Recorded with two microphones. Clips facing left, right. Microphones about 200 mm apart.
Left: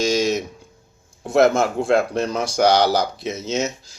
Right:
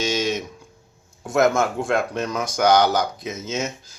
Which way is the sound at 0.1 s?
35° left (ahead or behind).